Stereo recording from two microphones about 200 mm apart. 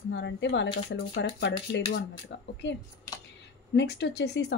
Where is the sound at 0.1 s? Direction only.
60° left (ahead or behind).